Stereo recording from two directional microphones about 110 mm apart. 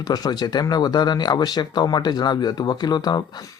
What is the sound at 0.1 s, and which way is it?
Speech, 40° left (ahead or behind).